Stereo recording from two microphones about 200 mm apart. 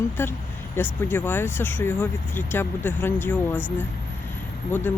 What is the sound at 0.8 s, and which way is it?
Speech, 10° left (ahead or behind).